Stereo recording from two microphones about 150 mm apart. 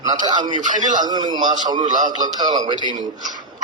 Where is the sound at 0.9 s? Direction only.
30° right (ahead or behind).